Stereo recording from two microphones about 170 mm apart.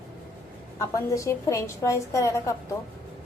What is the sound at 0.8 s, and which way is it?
A woman's voice, 20° left (ahead or behind).